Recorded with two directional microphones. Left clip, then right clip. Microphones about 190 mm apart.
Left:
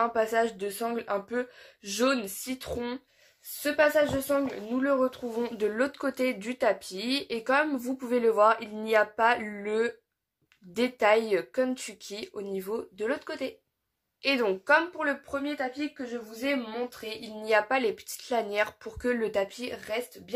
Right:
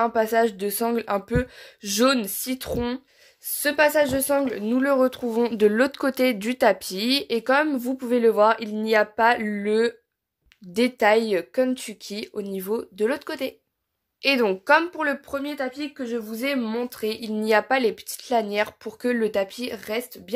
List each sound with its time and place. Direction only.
0.0 s a woman's voice: 30° right (ahead or behind)
3.6 s a woman's voice: 50° right (ahead or behind)